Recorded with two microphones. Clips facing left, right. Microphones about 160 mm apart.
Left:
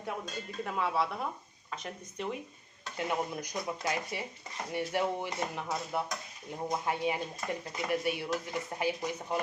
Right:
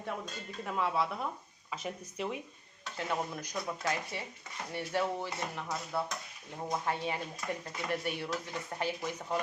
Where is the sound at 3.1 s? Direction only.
15° left (ahead or behind).